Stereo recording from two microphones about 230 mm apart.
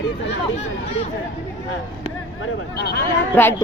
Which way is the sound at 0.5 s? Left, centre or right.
Left.